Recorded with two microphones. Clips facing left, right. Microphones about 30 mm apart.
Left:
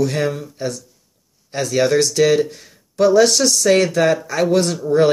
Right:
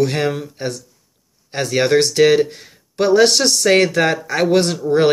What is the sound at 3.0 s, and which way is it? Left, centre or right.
Speech, right.